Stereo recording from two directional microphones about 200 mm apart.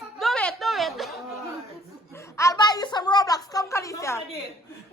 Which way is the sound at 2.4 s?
20° left (ahead or behind).